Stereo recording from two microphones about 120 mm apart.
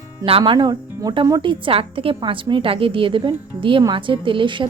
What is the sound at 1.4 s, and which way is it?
A woman's voice, 45° right (ahead or behind).